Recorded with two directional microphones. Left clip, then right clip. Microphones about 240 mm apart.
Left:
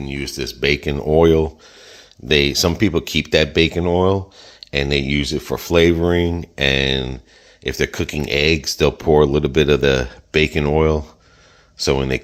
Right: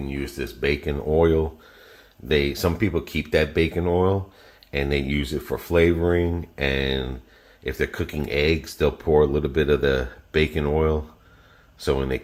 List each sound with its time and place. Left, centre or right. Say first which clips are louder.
0.0 s speech: left 5 dB; left